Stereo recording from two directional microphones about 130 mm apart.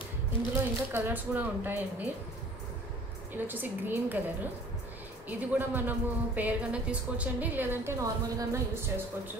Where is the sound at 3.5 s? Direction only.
15° right (ahead or behind).